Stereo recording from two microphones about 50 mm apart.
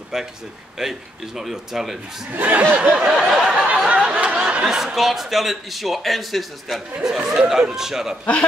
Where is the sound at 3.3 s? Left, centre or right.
Centre.